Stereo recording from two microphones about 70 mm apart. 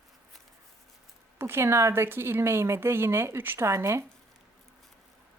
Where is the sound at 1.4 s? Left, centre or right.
Right.